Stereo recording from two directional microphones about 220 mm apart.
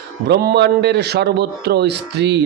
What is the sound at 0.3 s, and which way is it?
A man's voice, 50° right (ahead or behind).